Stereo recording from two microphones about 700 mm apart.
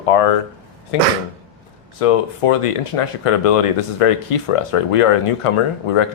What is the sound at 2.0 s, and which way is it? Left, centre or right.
Speech, left.